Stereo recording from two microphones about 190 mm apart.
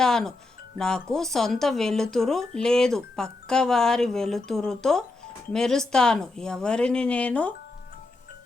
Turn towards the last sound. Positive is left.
turn(degrees=5)  # may be behind; listen again after turning